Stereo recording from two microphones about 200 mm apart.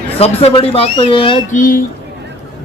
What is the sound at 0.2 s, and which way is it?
Speech, 30° left (ahead or behind).